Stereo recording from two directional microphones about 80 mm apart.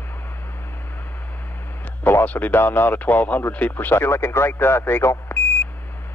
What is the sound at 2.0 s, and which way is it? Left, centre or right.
Speech, left.